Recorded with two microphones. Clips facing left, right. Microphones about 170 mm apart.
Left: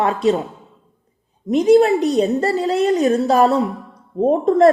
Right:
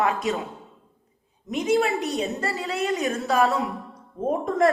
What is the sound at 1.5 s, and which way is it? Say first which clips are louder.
A woman's voice: left 10 dB; 35° left (ahead or behind).